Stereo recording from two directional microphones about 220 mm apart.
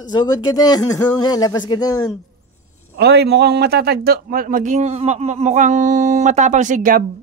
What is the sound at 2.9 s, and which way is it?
A man's voice, 50° right (ahead or behind).